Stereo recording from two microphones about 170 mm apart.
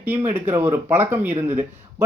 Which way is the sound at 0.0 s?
10° right (ahead or behind).